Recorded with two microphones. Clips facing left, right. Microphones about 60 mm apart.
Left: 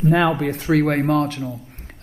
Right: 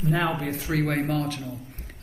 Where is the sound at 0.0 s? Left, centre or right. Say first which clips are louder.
Left 8 dB; left.